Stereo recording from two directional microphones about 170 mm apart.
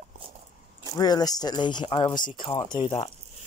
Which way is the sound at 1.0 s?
25° left (ahead or behind).